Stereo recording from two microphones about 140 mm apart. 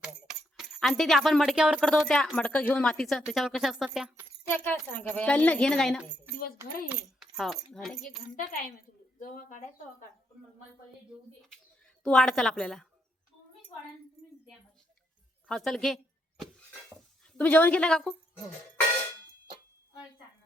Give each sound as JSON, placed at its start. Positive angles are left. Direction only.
{"t": 0.0, "sound": "a sound", "side_deg": -5}
{"t": 1.9, "sound": "speech", "side_deg": 5}
{"t": 4.4, "sound": "speech", "side_deg": 15}
{"t": 8.4, "sound": "speech", "side_deg": 70}
{"t": 12.0, "sound": "speech", "side_deg": 5}
{"t": 15.4, "sound": "speech", "side_deg": 5}
{"t": 17.3, "sound": "speech", "side_deg": 10}